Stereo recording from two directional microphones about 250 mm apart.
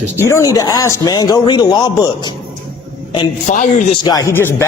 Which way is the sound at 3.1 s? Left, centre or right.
Left.